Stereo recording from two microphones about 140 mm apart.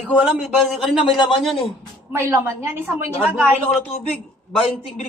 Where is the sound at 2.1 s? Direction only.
20° right (ahead or behind).